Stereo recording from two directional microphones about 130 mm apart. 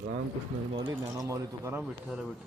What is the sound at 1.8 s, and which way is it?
Speech, 5° right (ahead or behind).